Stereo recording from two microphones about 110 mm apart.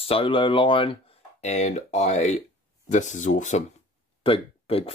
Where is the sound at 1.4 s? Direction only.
90° left.